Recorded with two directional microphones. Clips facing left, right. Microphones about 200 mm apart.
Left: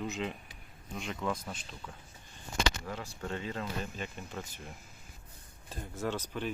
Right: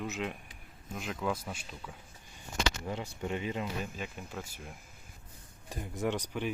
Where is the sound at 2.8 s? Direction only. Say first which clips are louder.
Right 3 dB; 20° right (ahead or behind).